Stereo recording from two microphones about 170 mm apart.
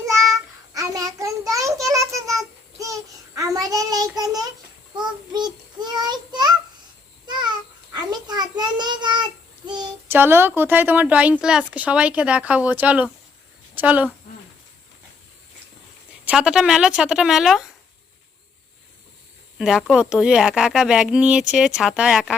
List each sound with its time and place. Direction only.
0.7 s child singing: 20° right (ahead or behind)
7.9 s child singing: 25° right (ahead or behind)
10.1 s speech: 15° right (ahead or behind)
16.2 s speech: 5° right (ahead or behind)
19.5 s speech: 5° right (ahead or behind)